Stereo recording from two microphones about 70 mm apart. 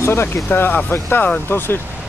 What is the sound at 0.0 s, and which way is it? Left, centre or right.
Speech, left.